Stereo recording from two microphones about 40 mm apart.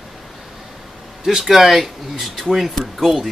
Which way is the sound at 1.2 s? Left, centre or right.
Centre.